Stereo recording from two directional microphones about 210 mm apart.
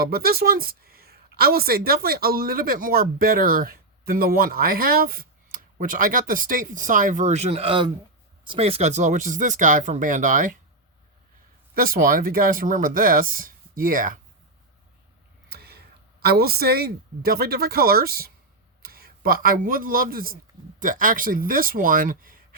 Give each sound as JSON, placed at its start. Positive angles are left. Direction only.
{"t": 0.0, "sound": "speech", "side_deg": -45}
{"t": 11.7, "sound": "speech", "side_deg": -45}
{"t": 15.4, "sound": "a sound", "side_deg": -50}
{"t": 16.2, "sound": "speech", "side_deg": -45}